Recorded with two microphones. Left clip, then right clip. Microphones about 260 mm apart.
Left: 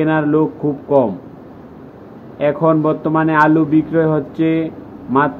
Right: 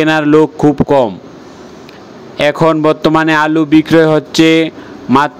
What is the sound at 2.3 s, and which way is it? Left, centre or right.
A man's voice, right.